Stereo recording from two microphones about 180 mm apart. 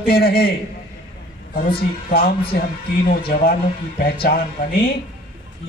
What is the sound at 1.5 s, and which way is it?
Speech, 55° left (ahead or behind).